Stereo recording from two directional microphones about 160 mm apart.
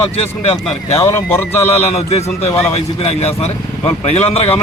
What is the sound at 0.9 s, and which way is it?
Speech, 15° left (ahead or behind).